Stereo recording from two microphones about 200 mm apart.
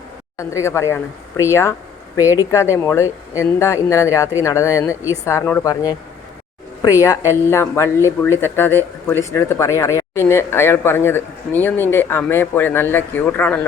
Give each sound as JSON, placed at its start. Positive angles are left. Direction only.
{"t": 0.3, "sound": "speech", "side_deg": 15}
{"t": 7.0, "sound": "speech", "side_deg": 15}